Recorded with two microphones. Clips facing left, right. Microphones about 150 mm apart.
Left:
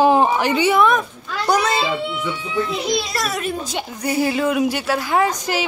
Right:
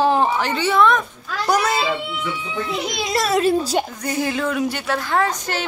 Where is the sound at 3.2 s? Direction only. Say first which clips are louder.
Right 7 dB; 30° right (ahead or behind).